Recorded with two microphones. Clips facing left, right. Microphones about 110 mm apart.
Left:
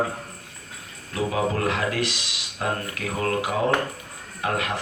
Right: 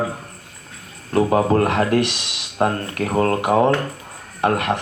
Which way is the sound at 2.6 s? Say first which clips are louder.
Right 7 dB; 45° right (ahead or behind).